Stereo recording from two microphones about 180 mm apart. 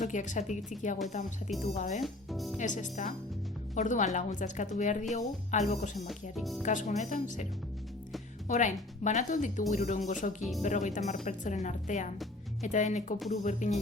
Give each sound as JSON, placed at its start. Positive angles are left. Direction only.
{"t": 0.0, "sound": "speech", "side_deg": 45}
{"t": 2.3, "sound": "speech", "side_deg": 0}
{"t": 2.6, "sound": "speech", "side_deg": 45}
{"t": 6.3, "sound": "speech", "side_deg": 0}
{"t": 6.6, "sound": "speech", "side_deg": 45}
{"t": 8.4, "sound": "speech", "side_deg": 45}